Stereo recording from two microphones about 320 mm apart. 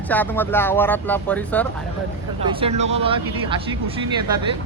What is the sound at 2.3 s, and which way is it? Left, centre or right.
Speech, centre.